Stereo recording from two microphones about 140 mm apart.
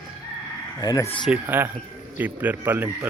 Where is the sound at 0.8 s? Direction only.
30° left (ahead or behind).